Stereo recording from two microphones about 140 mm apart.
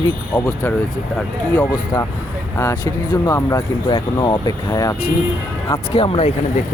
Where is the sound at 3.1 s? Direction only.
25° left (ahead or behind).